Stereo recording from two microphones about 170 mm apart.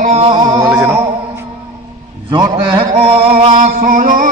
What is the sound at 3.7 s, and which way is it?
Music, 55° right (ahead or behind).